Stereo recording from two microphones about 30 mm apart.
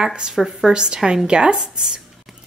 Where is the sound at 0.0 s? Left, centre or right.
Right.